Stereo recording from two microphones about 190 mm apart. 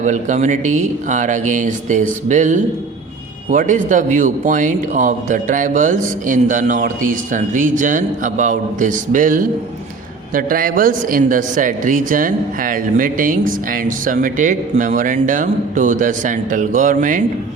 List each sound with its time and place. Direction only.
0.0 s speech: 40° right (ahead or behind)